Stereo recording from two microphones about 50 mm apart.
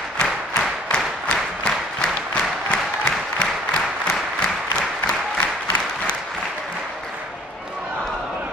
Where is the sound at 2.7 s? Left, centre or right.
Left.